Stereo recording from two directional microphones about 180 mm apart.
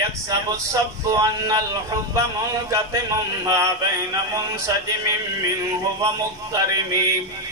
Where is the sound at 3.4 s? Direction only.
20° right (ahead or behind).